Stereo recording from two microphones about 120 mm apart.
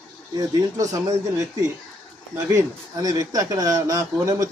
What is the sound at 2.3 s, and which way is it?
Speech, 25° right (ahead or behind).